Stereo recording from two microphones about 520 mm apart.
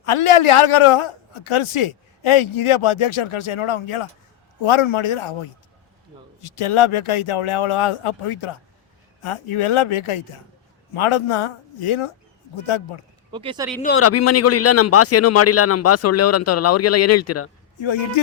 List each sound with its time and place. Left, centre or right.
0.0 s a man's voice: left
6.4 s a man's voice: left
13.3 s speech: centre
13.8 s speech: left
17.7 s a man's voice: left